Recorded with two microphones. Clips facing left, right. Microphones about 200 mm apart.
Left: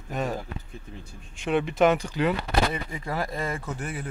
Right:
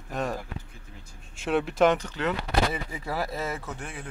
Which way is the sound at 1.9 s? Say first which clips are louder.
Left 4 dB; 10° left (ahead or behind).